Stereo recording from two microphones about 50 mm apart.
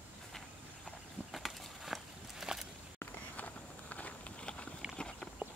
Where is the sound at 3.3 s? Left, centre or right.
Left.